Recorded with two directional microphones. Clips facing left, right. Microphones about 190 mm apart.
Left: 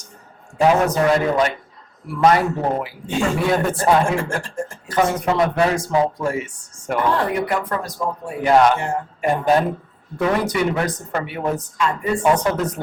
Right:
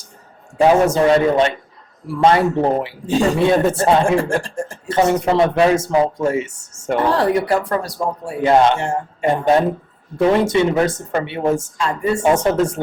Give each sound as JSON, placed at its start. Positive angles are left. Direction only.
{"t": 0.6, "sound": "speech", "side_deg": -25}